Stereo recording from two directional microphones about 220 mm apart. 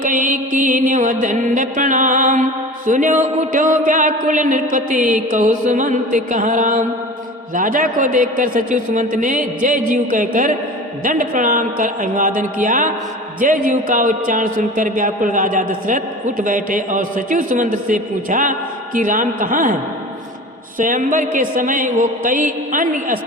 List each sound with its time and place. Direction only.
0.0 s music: 35° right (ahead or behind)
20.7 s music: 35° right (ahead or behind)